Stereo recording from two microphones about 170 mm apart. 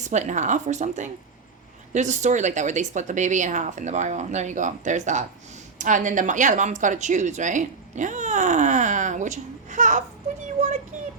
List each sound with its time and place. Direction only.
0.0 s speech: 45° right (ahead or behind)